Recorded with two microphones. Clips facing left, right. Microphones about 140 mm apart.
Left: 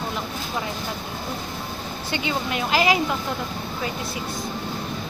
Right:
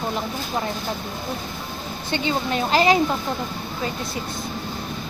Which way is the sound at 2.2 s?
35° right (ahead or behind).